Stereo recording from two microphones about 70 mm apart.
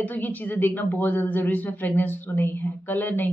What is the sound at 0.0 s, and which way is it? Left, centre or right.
A woman's voice, left.